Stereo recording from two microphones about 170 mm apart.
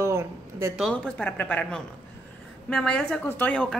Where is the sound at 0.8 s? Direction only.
5° left (ahead or behind).